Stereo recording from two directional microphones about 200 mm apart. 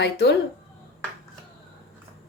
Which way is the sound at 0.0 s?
55° left (ahead or behind).